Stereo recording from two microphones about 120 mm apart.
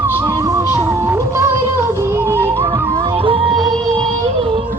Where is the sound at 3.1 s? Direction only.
50° right (ahead or behind).